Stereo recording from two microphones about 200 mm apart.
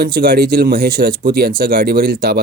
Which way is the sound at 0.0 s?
45° right (ahead or behind).